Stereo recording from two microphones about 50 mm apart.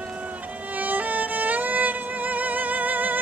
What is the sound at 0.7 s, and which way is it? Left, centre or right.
Violin, right.